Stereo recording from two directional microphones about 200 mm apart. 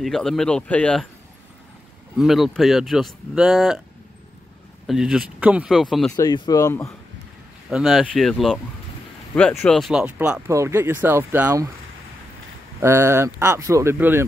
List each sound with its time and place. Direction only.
0.0 s speech: centre (ahead or behind)
2.1 s speech: centre (ahead or behind)
4.8 s speech: 5° right (ahead or behind)
6.1 s speech: 20° left (ahead or behind)
7.7 s speech: 5° right (ahead or behind)
12.8 s speech: 15° right (ahead or behind)